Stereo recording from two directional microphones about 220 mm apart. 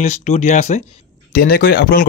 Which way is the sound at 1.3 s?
45° left (ahead or behind).